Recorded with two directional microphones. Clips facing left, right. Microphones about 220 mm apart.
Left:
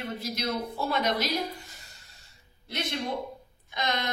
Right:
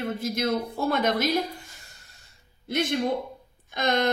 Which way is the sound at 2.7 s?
50° right (ahead or behind).